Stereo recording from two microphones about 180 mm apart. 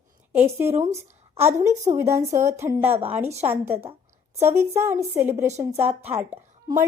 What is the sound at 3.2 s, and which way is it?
Speech, 35° right (ahead or behind).